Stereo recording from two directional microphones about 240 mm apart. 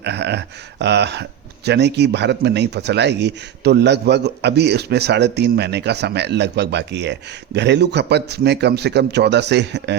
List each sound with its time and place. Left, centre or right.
0.0 s speech: right